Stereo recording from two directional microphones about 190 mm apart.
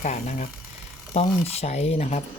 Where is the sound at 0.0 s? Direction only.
40° left (ahead or behind).